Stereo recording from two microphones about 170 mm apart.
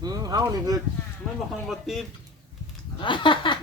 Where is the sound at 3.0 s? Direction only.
30° left (ahead or behind).